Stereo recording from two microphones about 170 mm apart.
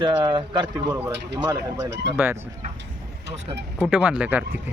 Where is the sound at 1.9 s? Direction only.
90° right.